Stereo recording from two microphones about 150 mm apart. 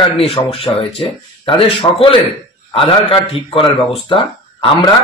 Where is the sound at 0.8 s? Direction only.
35° left (ahead or behind).